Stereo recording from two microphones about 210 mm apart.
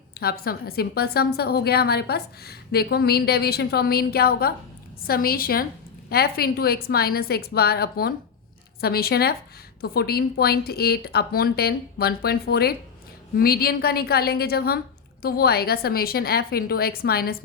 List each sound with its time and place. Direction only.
0.2 s a woman's voice: 45° left (ahead or behind)